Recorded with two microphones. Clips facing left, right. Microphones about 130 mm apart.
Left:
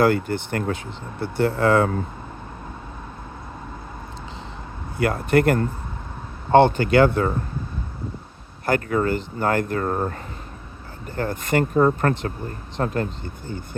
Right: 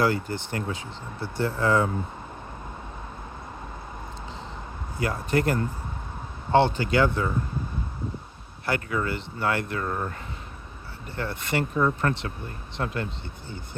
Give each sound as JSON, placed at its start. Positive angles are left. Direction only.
{"t": 0.0, "sound": "speech", "side_deg": 55}
{"t": 4.9, "sound": "speech", "side_deg": 60}
{"t": 8.6, "sound": "speech", "side_deg": 45}
{"t": 11.2, "sound": "speech", "side_deg": 45}